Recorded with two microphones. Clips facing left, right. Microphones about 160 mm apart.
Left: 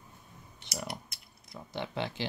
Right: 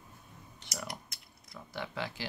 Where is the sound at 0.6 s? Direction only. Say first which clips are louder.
Left 3 dB; 25° left (ahead or behind).